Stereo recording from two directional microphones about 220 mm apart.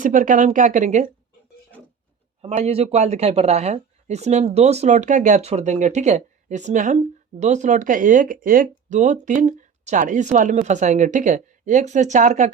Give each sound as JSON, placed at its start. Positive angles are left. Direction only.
{"t": 0.0, "sound": "speech", "side_deg": -35}
{"t": 2.4, "sound": "speech", "side_deg": -30}